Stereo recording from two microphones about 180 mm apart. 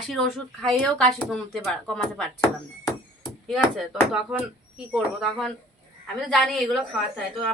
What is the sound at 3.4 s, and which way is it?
Speech, 5° right (ahead or behind).